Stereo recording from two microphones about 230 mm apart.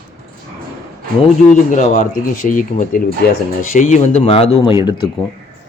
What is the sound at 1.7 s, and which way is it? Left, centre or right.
Speech, left.